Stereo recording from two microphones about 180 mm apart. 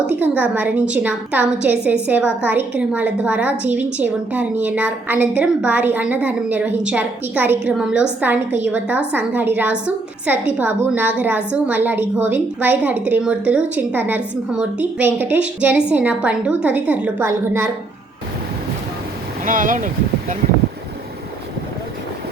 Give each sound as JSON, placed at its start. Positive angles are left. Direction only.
{"t": 0.0, "sound": "a woman's voice", "side_deg": -10}
{"t": 19.5, "sound": "speech", "side_deg": -45}